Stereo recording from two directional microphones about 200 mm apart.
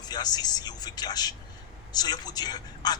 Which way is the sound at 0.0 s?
20° left (ahead or behind).